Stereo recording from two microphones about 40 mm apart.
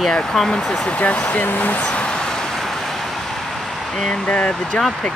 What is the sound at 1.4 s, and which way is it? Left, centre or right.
Speech, left.